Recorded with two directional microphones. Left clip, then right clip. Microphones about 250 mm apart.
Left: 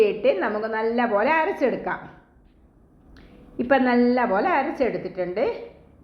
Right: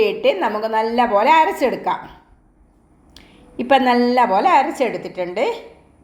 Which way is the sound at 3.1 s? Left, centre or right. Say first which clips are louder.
Right 2 dB; centre.